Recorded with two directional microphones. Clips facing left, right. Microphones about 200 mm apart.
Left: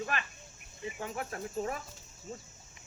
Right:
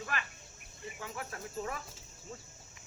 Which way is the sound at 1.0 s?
35° left (ahead or behind).